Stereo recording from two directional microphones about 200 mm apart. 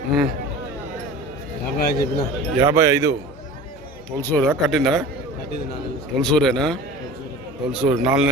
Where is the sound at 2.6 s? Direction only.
15° right (ahead or behind).